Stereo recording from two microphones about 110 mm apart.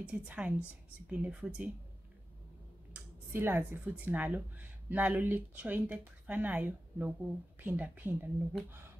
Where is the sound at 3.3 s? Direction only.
20° right (ahead or behind).